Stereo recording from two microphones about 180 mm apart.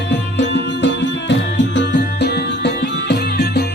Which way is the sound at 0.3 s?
75° left (ahead or behind).